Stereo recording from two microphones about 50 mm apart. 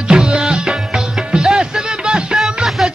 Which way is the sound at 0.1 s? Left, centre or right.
Centre.